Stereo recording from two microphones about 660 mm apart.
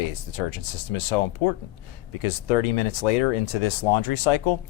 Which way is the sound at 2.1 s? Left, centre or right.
Left.